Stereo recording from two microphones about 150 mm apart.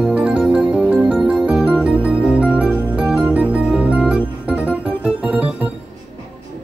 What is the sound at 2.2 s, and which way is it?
Organ, 5° right (ahead or behind).